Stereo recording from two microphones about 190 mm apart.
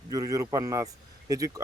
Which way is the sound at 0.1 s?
15° right (ahead or behind).